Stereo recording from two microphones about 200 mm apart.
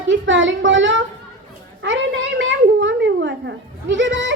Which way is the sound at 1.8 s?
65° right (ahead or behind).